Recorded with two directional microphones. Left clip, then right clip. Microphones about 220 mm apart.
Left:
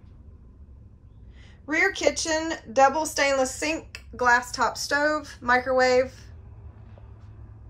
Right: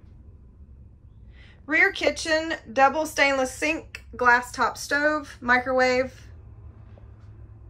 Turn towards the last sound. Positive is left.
turn(degrees=10)  # may be behind; listen again after turning